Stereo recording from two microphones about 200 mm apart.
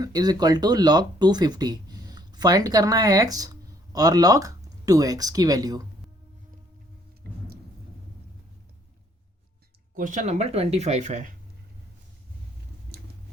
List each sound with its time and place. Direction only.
0.0 s speech: 20° right (ahead or behind)
9.9 s speech: 40° right (ahead or behind)